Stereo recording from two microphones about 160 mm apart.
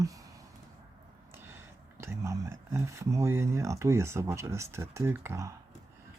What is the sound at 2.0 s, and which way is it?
Speech, 15° right (ahead or behind).